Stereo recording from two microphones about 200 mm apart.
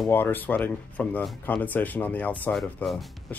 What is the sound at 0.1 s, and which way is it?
Speech, 10° left (ahead or behind).